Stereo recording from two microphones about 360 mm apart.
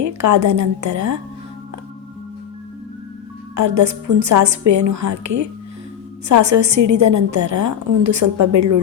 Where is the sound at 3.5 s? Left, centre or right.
Right.